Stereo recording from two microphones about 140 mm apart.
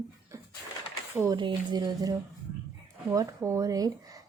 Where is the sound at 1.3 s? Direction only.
30° right (ahead or behind).